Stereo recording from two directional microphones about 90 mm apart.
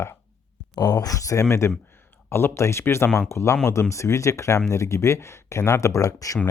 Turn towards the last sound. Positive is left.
turn(degrees=40)  # may be behind; listen again after turning